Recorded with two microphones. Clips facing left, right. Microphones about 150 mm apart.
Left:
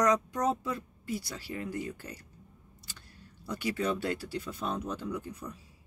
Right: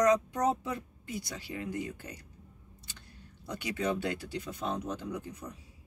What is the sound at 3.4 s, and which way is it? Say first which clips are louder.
Speech: left 1 dB; 20° right (ahead or behind).